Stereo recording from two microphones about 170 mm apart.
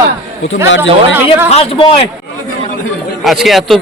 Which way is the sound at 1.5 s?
35° left (ahead or behind).